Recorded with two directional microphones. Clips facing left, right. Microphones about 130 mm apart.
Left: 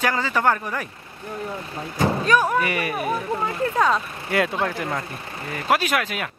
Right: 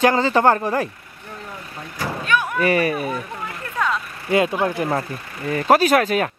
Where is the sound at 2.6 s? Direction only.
35° right (ahead or behind).